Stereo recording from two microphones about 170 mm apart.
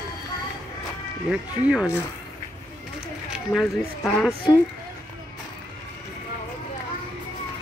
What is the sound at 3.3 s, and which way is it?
Speech, centre (ahead or behind).